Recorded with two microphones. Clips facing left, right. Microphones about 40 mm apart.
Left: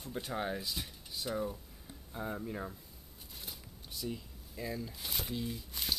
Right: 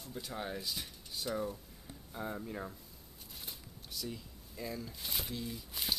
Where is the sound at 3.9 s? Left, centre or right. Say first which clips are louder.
Left 2 dB; centre.